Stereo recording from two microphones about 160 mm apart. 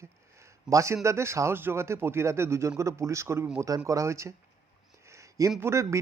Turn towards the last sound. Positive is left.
turn(degrees=-20)  # may be behind; listen again after turning